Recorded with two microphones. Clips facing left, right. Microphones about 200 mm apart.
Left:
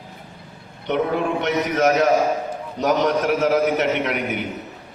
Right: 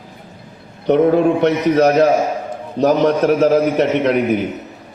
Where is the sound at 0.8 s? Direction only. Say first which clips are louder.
Right 9 dB; 40° right (ahead or behind).